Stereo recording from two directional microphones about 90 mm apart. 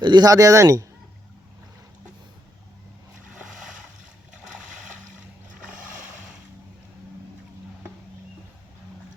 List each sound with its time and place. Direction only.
0.0 s speech: 50° right (ahead or behind); by 0.9 s 35° right (ahead or behind)